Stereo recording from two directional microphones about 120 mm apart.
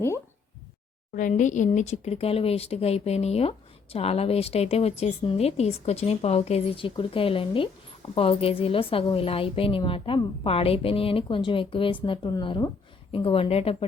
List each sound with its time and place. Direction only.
1.2 s speech: 90° left; by 13.8 s 55° left (ahead or behind)